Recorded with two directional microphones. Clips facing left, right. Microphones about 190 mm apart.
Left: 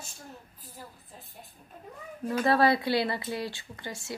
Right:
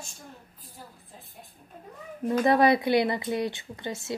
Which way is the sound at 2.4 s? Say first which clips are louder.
Right 3 dB; 20° right (ahead or behind).